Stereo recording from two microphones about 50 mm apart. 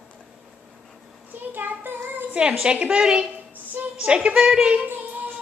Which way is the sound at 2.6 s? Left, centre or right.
Right.